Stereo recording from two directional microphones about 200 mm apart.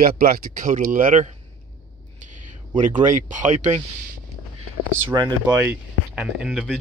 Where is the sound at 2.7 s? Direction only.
40° right (ahead or behind).